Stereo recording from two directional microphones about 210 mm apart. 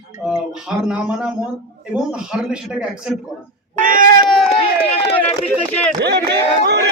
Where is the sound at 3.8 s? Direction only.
40° right (ahead or behind).